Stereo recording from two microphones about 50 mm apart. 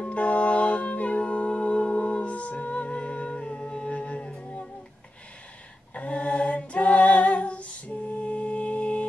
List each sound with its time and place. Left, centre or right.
0.0 s music: left
5.9 s a capella: left